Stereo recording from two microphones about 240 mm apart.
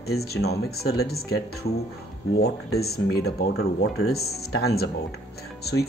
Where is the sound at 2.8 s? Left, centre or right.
Left.